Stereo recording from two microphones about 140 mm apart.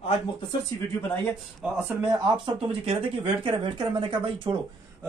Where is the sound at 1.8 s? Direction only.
15° right (ahead or behind).